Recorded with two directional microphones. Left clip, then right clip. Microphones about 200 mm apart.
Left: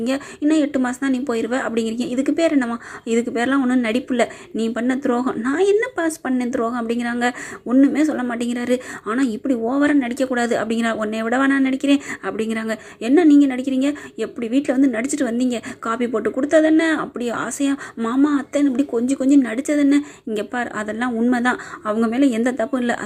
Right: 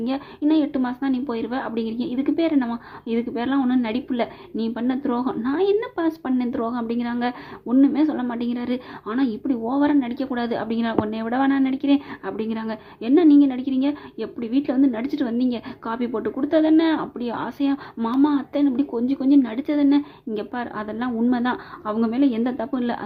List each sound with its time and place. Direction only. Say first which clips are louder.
0.0 s a woman's voice: left 3 dB; 15° left (ahead or behind)